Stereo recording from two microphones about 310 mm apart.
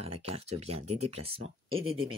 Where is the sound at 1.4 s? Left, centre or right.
Right.